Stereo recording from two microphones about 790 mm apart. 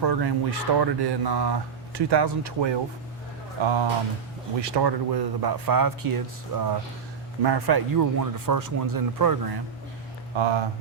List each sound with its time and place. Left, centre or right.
0.0 s speech: right